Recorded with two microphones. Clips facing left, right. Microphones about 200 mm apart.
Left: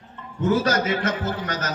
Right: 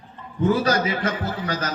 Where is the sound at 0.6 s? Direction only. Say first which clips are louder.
Even; 30° right (ahead or behind).